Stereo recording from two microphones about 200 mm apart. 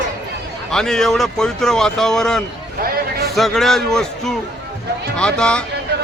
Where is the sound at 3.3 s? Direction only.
Centre (ahead or behind).